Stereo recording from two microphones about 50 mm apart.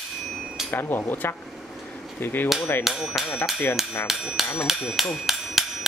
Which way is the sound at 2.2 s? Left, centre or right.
Left.